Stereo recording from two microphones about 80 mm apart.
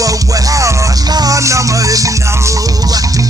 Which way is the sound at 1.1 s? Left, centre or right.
Right.